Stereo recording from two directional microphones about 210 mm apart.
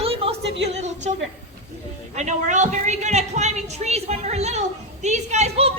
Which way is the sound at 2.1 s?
35° right (ahead or behind).